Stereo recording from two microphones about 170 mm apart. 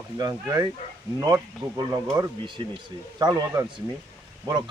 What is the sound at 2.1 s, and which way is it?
Speech, 25° right (ahead or behind).